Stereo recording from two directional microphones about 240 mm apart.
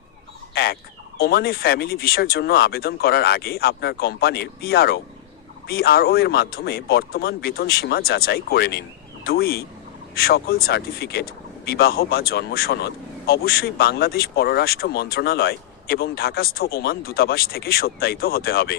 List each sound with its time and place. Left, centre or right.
0.5 s turkey: left
1.2 s speech: left